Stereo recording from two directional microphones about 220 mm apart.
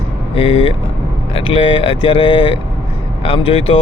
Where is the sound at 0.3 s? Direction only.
25° left (ahead or behind).